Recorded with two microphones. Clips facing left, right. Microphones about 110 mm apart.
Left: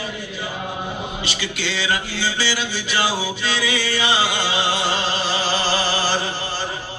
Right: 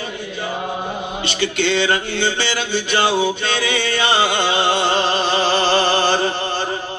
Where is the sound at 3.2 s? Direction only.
60° right (ahead or behind).